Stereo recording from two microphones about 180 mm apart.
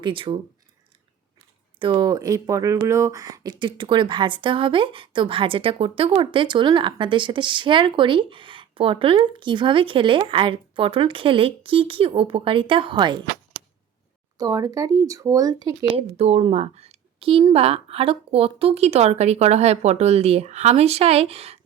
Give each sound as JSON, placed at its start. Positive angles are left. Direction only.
{"t": 0.0, "sound": "speech", "side_deg": -30}
{"t": 1.8, "sound": "speech", "side_deg": -25}
{"t": 14.3, "sound": "speech", "side_deg": -20}
{"t": 16.0, "sound": "a woman's voice", "side_deg": -35}